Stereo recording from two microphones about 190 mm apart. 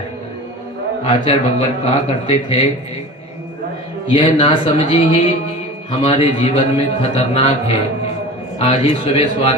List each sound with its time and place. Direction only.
1.0 s a man's voice: 30° left (ahead or behind)
4.1 s a man's voice: 30° left (ahead or behind)